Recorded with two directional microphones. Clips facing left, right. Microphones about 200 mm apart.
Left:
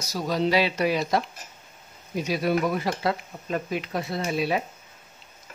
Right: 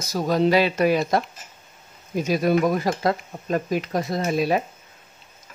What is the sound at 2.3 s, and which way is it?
Speech, 45° right (ahead or behind).